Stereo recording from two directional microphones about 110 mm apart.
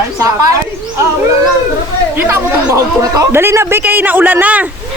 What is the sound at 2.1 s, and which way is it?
Speech, 20° right (ahead or behind).